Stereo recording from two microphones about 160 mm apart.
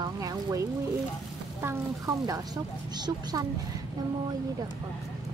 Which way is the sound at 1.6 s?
20° right (ahead or behind).